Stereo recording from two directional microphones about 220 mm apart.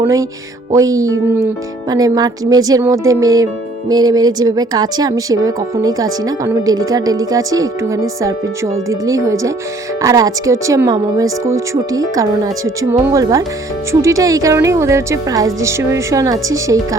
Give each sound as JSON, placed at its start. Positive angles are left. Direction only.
{"t": 0.7, "sound": "speech", "side_deg": -15}